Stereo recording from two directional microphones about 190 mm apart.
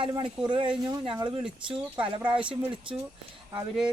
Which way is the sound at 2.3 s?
5° right (ahead or behind).